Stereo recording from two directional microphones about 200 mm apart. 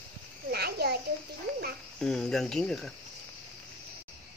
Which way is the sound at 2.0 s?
Centre (ahead or behind).